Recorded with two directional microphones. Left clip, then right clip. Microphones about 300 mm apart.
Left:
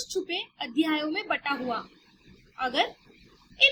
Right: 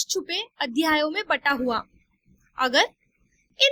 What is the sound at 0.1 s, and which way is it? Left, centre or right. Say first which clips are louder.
A child's voice: right 3 dB; right.